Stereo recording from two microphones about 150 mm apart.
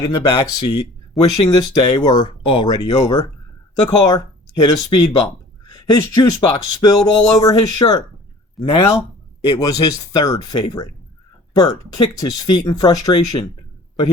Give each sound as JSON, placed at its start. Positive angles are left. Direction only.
{"t": 0.0, "sound": "speech", "side_deg": 25}
{"t": 8.6, "sound": "speech", "side_deg": 0}
{"t": 9.4, "sound": "speech", "side_deg": 25}